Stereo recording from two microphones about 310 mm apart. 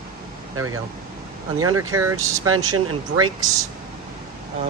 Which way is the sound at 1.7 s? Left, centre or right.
Centre.